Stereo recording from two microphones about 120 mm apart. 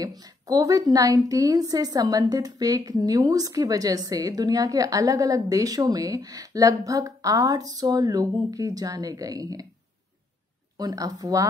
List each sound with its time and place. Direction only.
0.0 s a woman's voice: 35° right (ahead or behind)
10.8 s a woman's voice: 35° right (ahead or behind)